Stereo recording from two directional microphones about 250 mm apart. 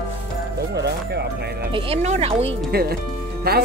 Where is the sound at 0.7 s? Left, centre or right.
Right.